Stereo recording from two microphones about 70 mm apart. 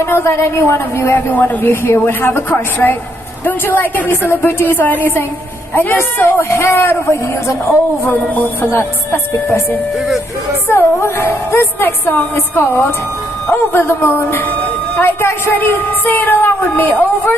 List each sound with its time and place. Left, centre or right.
0.0 s a woman's voice: left
10.7 s speech: left